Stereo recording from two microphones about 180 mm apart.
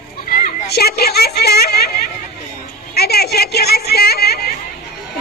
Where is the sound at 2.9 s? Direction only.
60° left (ahead or behind).